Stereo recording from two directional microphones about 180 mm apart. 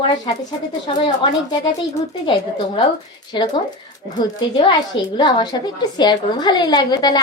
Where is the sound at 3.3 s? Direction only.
25° left (ahead or behind).